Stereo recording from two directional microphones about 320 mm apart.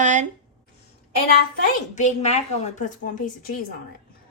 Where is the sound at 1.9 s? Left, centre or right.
Left.